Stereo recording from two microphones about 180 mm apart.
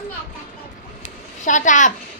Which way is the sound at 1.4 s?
45° left (ahead or behind).